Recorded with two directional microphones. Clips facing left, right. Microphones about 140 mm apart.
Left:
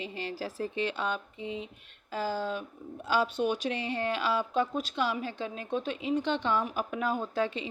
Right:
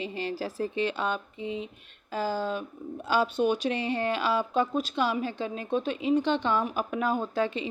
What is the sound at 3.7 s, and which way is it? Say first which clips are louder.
A woman's voice: right 3 dB; 35° right (ahead or behind).